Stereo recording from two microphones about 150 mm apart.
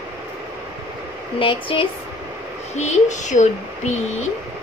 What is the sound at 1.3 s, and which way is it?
Speech, 35° left (ahead or behind).